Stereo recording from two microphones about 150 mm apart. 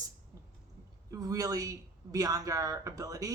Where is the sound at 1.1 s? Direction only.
25° right (ahead or behind).